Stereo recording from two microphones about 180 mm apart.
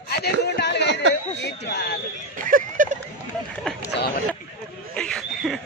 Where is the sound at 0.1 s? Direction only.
65° left (ahead or behind).